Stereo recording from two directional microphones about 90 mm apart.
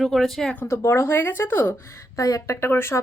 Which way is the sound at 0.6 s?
30° left (ahead or behind).